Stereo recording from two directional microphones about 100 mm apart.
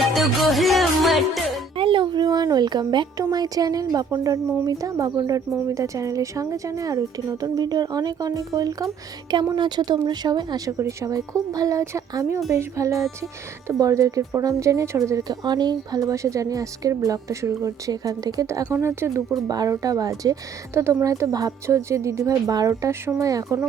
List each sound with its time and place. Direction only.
0.0 s music: centre (ahead or behind)
1.7 s a sound: 60° right (ahead or behind)
3.3 s a woman's voice: 40° right (ahead or behind)
9.3 s speech: 45° right (ahead or behind)
10.8 s a woman's voice: 30° right (ahead or behind)
19.5 s a woman's voice: 40° right (ahead or behind)